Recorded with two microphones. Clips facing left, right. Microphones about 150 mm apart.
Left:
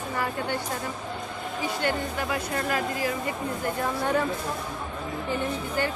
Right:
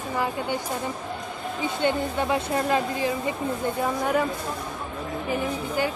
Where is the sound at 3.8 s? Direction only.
10° right (ahead or behind).